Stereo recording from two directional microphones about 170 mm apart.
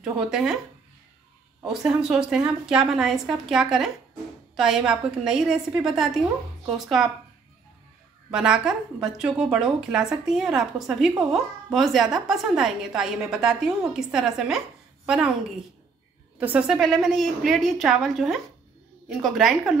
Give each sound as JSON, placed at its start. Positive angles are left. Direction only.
{"t": 0.0, "sound": "a woman's voice", "side_deg": -5}
{"t": 1.7, "sound": "a woman's voice", "side_deg": -5}
{"t": 8.3, "sound": "a woman's voice", "side_deg": -5}
{"t": 16.3, "sound": "a woman's voice", "side_deg": -10}